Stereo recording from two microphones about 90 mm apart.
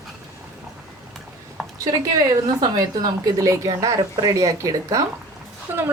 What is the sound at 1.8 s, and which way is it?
A woman's voice, 40° right (ahead or behind).